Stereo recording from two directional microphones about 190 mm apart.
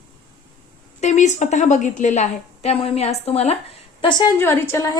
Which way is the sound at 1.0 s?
35° left (ahead or behind).